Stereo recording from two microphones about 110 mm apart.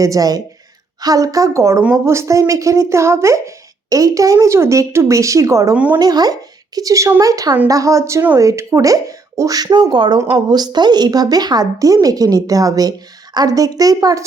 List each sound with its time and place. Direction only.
0.0 s a woman's voice: 30° right (ahead or behind)
5.7 s speech: 15° right (ahead or behind)
6.0 s a woman's voice: 35° right (ahead or behind)